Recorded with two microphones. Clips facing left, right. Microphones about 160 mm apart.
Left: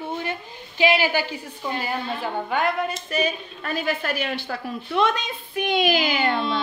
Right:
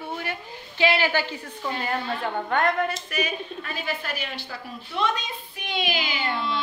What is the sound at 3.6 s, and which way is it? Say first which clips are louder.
Speech: left 11 dB; 50° left (ahead or behind).